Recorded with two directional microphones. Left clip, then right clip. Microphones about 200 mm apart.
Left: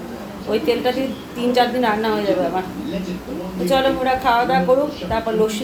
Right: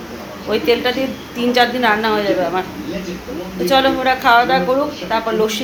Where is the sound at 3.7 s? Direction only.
15° right (ahead or behind).